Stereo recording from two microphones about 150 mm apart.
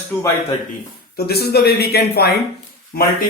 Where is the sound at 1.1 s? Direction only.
90° left.